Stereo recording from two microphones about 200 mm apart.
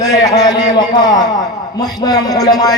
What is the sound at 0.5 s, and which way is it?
A man's voice, 20° left (ahead or behind).